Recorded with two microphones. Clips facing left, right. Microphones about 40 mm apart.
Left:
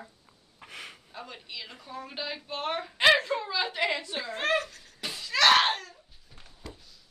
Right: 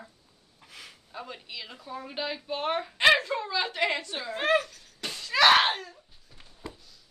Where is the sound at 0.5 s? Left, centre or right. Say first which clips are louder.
Left 5 dB; left.